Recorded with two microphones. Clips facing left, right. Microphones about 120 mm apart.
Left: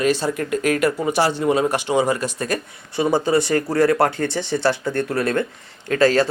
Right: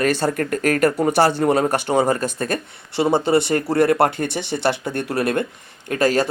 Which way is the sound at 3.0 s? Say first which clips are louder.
Right 1 dB; 25° right (ahead or behind).